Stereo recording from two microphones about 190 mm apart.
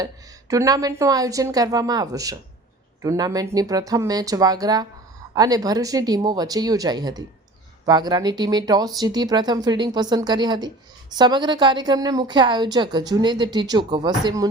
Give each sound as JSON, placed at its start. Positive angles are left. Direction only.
{"t": 0.0, "sound": "a woman's voice", "side_deg": -15}